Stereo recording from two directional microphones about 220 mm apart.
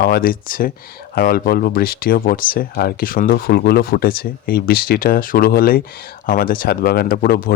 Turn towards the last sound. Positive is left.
turn(degrees=40)  # may be behind; listen again after turning